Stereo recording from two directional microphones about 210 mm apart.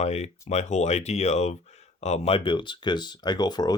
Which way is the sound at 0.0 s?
30° left (ahead or behind).